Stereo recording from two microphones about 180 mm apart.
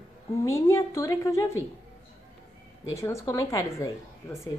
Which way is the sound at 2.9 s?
15° left (ahead or behind).